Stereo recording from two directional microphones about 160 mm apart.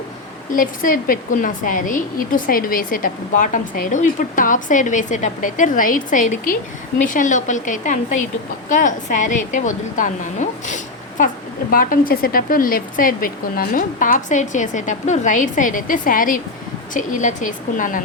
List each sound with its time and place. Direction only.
0.5 s a woman's voice: 55° left (ahead or behind)